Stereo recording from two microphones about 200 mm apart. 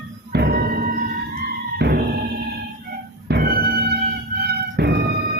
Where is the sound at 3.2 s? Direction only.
50° right (ahead or behind).